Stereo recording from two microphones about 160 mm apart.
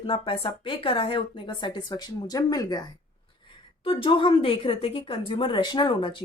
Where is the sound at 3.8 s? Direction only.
35° left (ahead or behind).